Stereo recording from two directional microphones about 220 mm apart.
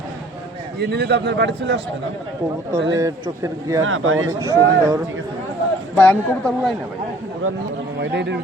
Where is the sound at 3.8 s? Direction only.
65° right (ahead or behind).